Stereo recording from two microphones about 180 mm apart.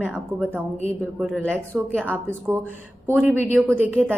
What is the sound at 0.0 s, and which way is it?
A woman's voice, 5° right (ahead or behind).